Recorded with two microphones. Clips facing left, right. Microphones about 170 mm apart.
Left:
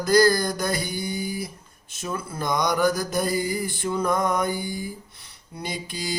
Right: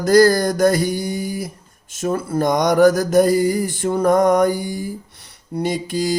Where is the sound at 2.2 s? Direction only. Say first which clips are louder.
Right 7 dB; 70° right (ahead or behind).